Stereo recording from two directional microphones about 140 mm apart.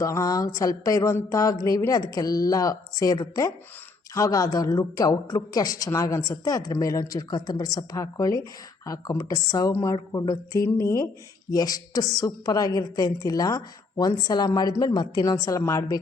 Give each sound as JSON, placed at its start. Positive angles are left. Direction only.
{"t": 0.0, "sound": "a woman's voice", "side_deg": 25}